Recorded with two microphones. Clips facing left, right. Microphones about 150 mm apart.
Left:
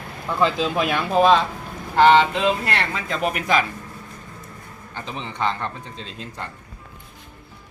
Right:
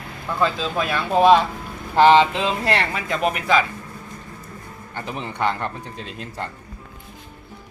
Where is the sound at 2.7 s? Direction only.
15° right (ahead or behind).